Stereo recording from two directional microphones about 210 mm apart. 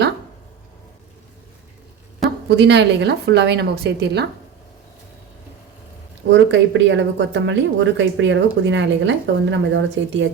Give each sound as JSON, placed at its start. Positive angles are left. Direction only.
{"t": 2.2, "sound": "a sound", "side_deg": 0}
{"t": 2.6, "sound": "a woman's voice", "side_deg": -55}
{"t": 6.2, "sound": "speech", "side_deg": -60}